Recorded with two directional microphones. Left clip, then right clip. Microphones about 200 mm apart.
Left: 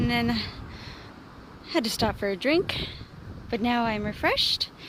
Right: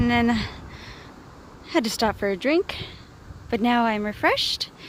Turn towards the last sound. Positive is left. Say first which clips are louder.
# right 2 dB
turn(degrees=-25)  # may be behind; listen again after turning